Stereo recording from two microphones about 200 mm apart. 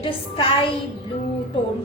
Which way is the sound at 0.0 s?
25° left (ahead or behind).